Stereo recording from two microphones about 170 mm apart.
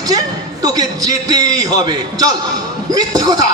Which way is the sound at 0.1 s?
20° right (ahead or behind).